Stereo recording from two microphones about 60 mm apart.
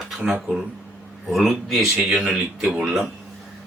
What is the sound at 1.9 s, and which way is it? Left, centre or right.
A man's voice, centre.